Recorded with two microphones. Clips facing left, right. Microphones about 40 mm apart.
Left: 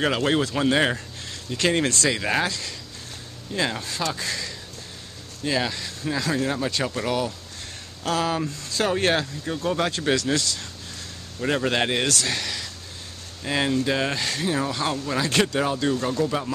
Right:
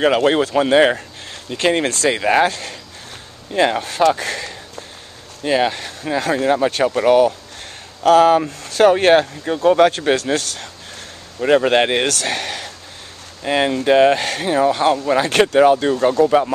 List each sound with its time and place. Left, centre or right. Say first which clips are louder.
0.0 s speech: right 7 dB; right
2.4 s speech: right 9 dB; right
5.4 s speech: right 8 dB; right
11.3 s speech: right 9 dB; right
13.4 s speech: right 6 dB; right
14.5 s speech: right 13 dB; right